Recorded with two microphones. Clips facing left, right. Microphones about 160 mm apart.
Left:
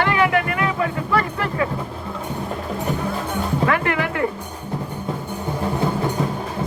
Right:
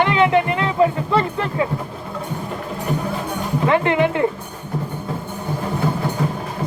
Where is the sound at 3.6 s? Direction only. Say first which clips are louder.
Right 7 dB; 25° right (ahead or behind).